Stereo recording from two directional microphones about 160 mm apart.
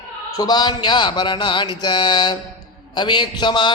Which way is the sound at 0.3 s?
25° left (ahead or behind).